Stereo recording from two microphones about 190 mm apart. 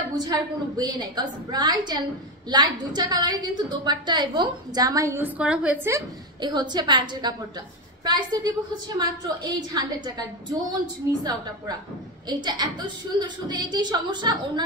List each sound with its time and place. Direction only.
0.2 s a woman's voice: 20° right (ahead or behind)
12.3 s a woman's voice: 20° right (ahead or behind)